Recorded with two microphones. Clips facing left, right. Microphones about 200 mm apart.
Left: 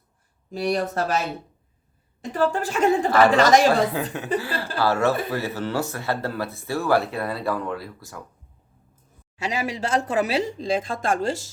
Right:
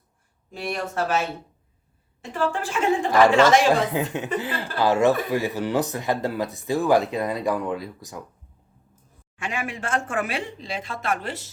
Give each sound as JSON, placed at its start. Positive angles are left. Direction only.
{"t": 0.5, "sound": "speech", "side_deg": 35}
{"t": 2.3, "sound": "speech", "side_deg": 40}
{"t": 3.1, "sound": "speech", "side_deg": -15}
{"t": 3.3, "sound": "speech", "side_deg": 40}
{"t": 3.8, "sound": "speech", "side_deg": -20}
{"t": 9.6, "sound": "speech", "side_deg": 40}